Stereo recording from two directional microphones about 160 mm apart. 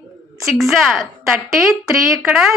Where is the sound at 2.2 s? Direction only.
5° right (ahead or behind).